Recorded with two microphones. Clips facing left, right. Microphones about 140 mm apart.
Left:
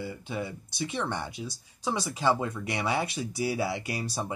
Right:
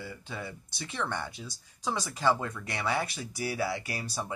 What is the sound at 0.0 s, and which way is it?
Speech, 15° left (ahead or behind).